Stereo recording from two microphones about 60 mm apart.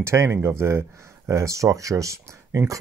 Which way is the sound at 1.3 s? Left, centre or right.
Right.